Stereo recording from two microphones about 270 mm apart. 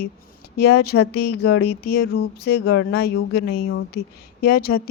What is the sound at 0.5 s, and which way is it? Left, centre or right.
A woman's voice, left.